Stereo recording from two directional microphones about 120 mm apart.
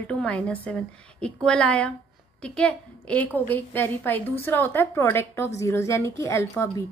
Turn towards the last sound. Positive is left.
turn(degrees=25)  # may be behind; listen again after turning